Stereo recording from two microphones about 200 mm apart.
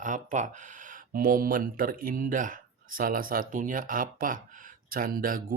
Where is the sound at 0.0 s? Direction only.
40° right (ahead or behind).